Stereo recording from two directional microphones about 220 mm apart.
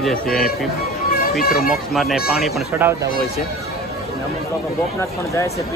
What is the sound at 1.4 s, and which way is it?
Speech, 40° left (ahead or behind).